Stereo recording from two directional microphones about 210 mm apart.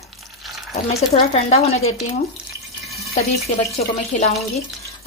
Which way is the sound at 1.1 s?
30° left (ahead or behind).